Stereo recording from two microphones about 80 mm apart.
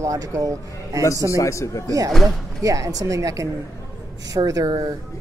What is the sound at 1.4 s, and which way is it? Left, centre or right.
Speech, left.